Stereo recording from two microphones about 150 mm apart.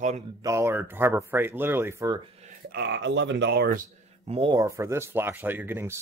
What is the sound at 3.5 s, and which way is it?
Speech, 90° right.